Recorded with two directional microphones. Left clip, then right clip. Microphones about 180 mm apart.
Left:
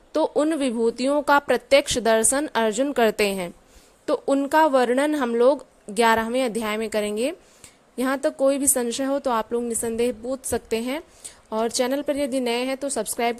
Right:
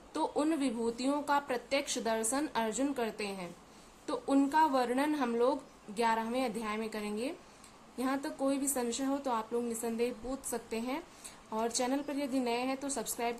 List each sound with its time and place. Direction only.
0.1 s speech: 40° left (ahead or behind); by 3.5 s 55° left (ahead or behind)
4.0 s a woman's voice: 40° left (ahead or behind)